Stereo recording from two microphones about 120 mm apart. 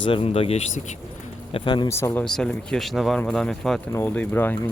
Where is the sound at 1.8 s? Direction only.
20° left (ahead or behind).